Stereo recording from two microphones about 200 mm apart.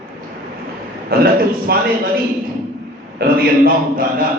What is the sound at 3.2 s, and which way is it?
Speech, 55° right (ahead or behind).